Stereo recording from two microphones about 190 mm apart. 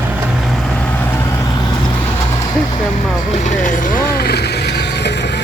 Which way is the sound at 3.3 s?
40° left (ahead or behind).